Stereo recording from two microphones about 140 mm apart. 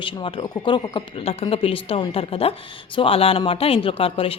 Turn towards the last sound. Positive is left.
turn(degrees=40)  # may be behind; listen again after turning